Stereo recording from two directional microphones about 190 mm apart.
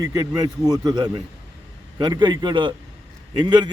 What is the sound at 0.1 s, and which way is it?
A man's voice, 20° right (ahead or behind).